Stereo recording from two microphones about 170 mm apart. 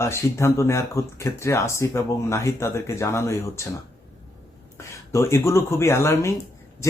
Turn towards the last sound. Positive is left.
turn(degrees=15)  # may be behind; listen again after turning